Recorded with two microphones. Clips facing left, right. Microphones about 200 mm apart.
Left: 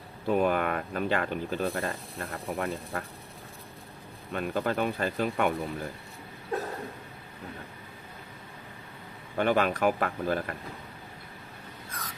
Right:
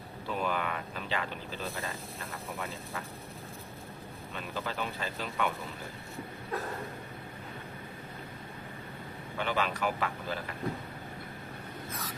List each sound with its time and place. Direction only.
0.3 s speech: 50° left (ahead or behind)
4.3 s speech: 50° left (ahead or behind)
9.4 s speech: 50° left (ahead or behind)